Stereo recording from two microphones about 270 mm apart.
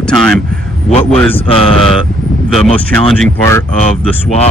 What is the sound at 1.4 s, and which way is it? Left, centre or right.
Speech, centre.